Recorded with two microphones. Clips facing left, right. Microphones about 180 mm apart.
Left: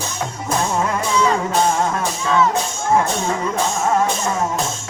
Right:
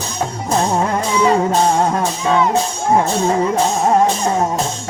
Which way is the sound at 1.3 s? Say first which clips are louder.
Right 4 dB; 35° right (ahead or behind).